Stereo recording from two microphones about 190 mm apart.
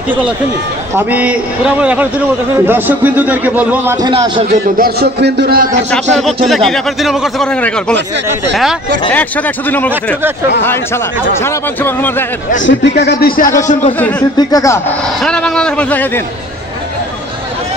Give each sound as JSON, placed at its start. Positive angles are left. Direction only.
{"t": 0.9, "sound": "a man's voice", "side_deg": -10}
{"t": 4.1, "sound": "a man's voice", "side_deg": -30}
{"t": 4.5, "sound": "speech", "side_deg": -55}
{"t": 6.1, "sound": "speech", "side_deg": 0}
{"t": 9.7, "sound": "speech", "side_deg": 10}
{"t": 11.4, "sound": "speech", "side_deg": 10}
{"t": 12.6, "sound": "a man's voice", "side_deg": 60}
{"t": 13.6, "sound": "a man's voice", "side_deg": 40}
{"t": 14.3, "sound": "speech", "side_deg": 20}
{"t": 15.2, "sound": "speech", "side_deg": 5}